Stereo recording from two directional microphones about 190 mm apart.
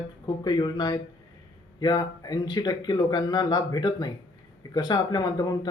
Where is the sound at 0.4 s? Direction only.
20° left (ahead or behind).